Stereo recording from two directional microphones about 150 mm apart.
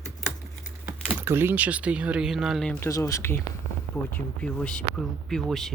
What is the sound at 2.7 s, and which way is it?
Speech, 20° left (ahead or behind).